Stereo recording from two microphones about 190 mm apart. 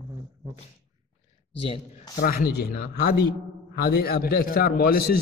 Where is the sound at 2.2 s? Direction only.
50° left (ahead or behind).